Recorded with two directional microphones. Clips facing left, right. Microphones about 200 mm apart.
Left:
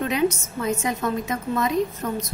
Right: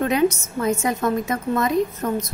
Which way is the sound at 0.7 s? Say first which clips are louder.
Right 3 dB; 50° right (ahead or behind).